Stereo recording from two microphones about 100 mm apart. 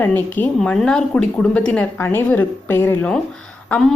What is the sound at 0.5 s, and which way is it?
A woman's voice, 5° left (ahead or behind).